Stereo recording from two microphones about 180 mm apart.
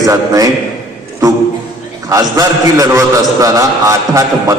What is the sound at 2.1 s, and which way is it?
A man's voice, 20° right (ahead or behind).